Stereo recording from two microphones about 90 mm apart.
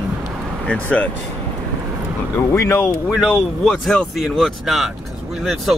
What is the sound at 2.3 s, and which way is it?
Speech, 30° left (ahead or behind).